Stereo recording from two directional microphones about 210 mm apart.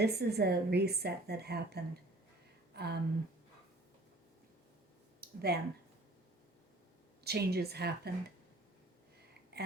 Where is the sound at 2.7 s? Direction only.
50° right (ahead or behind).